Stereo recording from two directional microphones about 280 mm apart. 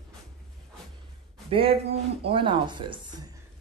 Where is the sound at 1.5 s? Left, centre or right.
Centre.